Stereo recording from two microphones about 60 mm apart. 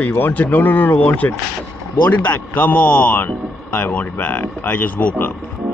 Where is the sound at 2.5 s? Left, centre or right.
Left.